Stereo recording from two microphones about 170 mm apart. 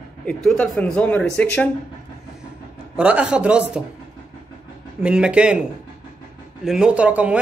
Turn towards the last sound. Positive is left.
turn(degrees=-5)  # may be behind; listen again after turning